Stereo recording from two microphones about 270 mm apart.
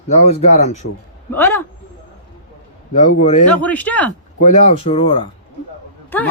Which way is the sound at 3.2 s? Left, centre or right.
Left.